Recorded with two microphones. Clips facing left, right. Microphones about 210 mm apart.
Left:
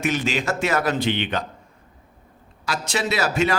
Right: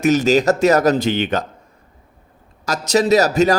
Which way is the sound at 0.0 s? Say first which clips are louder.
Right 10 dB; 40° right (ahead or behind).